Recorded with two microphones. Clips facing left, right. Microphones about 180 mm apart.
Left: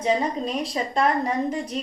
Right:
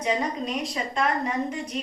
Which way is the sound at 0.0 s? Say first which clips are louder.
Left 3 dB; 30° left (ahead or behind).